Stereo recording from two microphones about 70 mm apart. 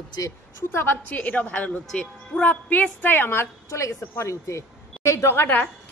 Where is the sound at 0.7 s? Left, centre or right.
Left; by 2.4 s centre.